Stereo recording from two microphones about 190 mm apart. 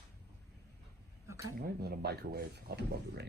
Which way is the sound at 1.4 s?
55° right (ahead or behind).